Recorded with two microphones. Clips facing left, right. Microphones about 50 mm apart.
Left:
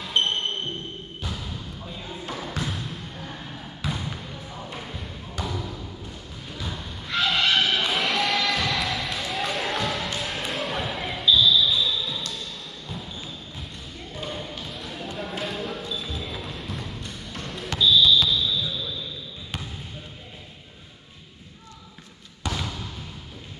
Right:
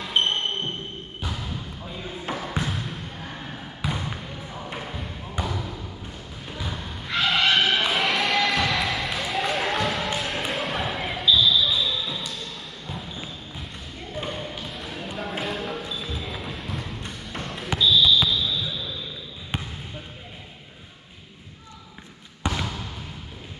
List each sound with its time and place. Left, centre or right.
0.0 s basketball bounce: centre
2.2 s a sound: centre
3.8 s trickle: centre
4.6 s basketball bounce: centre
6.5 s thump: centre
7.9 s basketball bounce: centre
10.1 s a sound: centre
10.5 s basketball bounce: centre
14.3 s a sound: centre
15.4 s basketball bounce: centre
19.5 s basketball bounce: right
22.4 s trickle: centre